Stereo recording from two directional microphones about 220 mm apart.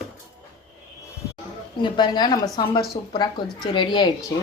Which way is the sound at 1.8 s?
20° left (ahead or behind).